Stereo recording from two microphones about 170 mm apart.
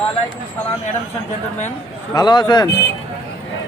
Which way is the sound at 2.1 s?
25° left (ahead or behind).